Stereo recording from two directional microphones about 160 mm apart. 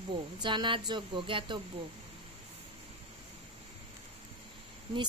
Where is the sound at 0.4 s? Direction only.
30° right (ahead or behind).